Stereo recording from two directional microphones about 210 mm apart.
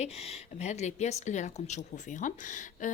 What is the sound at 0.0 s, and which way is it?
A woman's voice, 30° left (ahead or behind).